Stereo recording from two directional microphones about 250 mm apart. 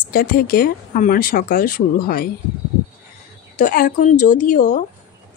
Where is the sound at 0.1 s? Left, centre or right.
Left.